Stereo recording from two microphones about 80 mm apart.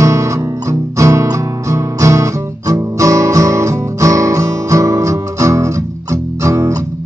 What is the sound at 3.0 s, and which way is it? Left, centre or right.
Music, right.